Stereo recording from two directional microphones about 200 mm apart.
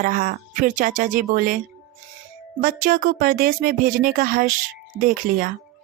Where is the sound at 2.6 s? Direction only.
45° right (ahead or behind).